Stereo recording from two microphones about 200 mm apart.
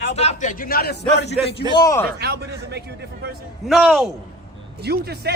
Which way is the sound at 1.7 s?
15° left (ahead or behind).